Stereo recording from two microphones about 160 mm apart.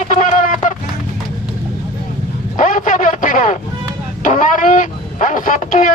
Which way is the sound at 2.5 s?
50° left (ahead or behind).